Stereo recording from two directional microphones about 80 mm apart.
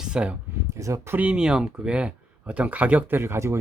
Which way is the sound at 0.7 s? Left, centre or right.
Right.